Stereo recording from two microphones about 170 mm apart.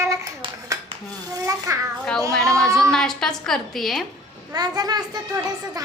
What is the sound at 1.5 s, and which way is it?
Babbling, 20° right (ahead or behind).